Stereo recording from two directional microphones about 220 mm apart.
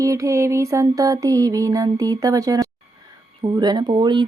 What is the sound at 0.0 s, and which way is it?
Mantra, 15° right (ahead or behind).